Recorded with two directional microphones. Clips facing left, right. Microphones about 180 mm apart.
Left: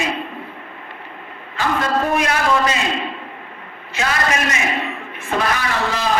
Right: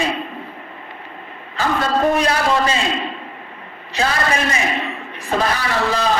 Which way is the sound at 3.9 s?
35° right (ahead or behind).